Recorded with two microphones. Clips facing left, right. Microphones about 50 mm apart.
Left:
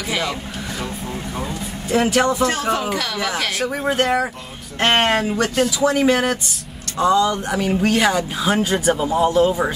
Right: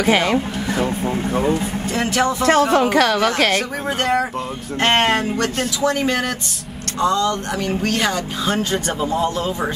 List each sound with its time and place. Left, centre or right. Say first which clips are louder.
0.0 s speech: right 7 dB; right
1.9 s speech: left 3 dB; centre
2.7 s speech: right 7 dB; right
3.9 s speech: right 2 dB; centre